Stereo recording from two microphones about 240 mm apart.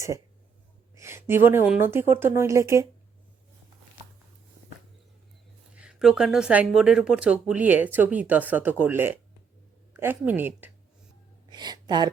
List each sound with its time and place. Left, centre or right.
0.9 s a woman's voice: centre
5.7 s a woman's voice: centre
11.4 s a sound: centre